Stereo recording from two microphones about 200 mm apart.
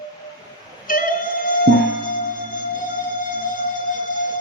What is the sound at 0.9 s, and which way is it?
Music, 45° left (ahead or behind).